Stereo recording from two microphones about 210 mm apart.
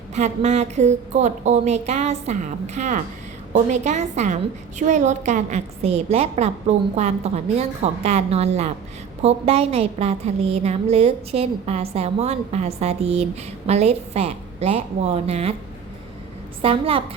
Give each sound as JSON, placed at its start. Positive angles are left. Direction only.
{"t": 0.1, "sound": "a woman's voice", "side_deg": -30}
{"t": 16.6, "sound": "a woman's voice", "side_deg": -25}